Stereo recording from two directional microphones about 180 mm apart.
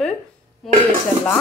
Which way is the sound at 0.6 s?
Centre (ahead or behind).